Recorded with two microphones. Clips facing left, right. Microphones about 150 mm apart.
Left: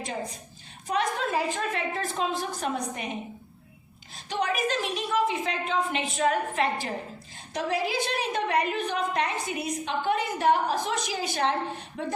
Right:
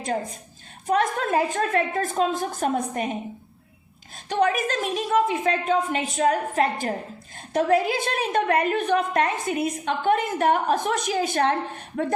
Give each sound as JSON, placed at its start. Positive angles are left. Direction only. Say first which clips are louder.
{"t": 0.9, "sound": "a woman's voice", "louder": "right 5 dB", "side_deg": -50}
{"t": 4.3, "sound": "a woman's voice", "louder": "right 5 dB", "side_deg": -50}